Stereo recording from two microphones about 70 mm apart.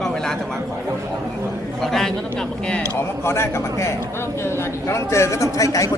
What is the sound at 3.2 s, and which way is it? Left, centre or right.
A man's voice, left.